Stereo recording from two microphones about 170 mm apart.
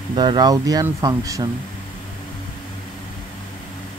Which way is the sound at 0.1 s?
25° right (ahead or behind).